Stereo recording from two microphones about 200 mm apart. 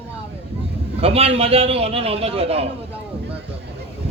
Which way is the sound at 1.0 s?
30° right (ahead or behind).